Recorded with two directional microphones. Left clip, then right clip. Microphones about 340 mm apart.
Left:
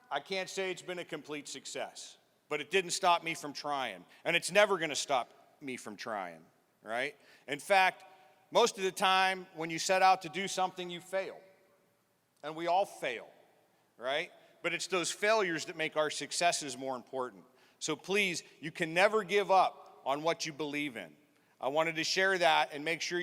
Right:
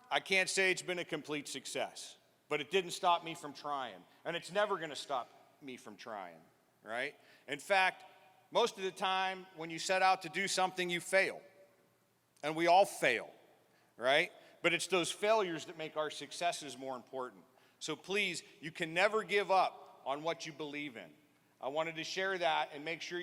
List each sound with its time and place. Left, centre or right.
0.1 s a man's voice: centre
12.4 s a man's voice: centre; by 23.2 s left